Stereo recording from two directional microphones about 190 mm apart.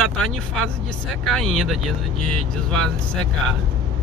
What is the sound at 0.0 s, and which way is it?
Speech, centre (ahead or behind).